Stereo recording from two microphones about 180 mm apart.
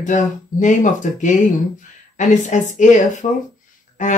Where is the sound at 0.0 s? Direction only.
45° left (ahead or behind).